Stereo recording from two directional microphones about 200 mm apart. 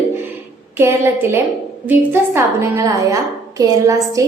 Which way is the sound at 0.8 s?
10° right (ahead or behind).